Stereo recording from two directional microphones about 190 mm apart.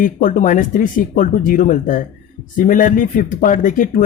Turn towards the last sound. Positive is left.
turn(degrees=45)  # may be behind; listen again after turning